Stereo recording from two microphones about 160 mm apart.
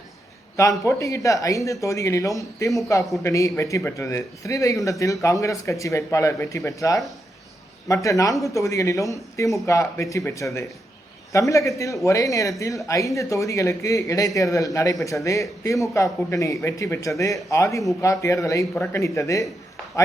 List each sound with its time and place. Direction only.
0.5 s speech: 20° left (ahead or behind)